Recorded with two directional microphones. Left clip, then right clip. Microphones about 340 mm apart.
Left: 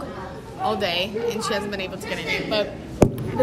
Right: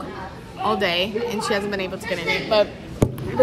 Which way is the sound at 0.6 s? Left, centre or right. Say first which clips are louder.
Right 2 dB; centre.